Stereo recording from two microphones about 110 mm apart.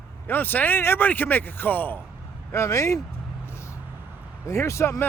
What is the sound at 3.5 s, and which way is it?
Vehicle, 25° left (ahead or behind).